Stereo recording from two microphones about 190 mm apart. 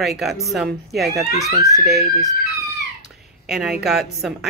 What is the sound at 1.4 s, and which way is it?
Speech, 15° right (ahead or behind).